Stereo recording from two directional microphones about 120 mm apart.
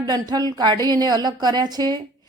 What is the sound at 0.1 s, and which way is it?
A woman's voice, 35° right (ahead or behind).